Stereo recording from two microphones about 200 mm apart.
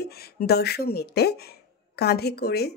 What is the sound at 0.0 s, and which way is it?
Speech, 50° left (ahead or behind).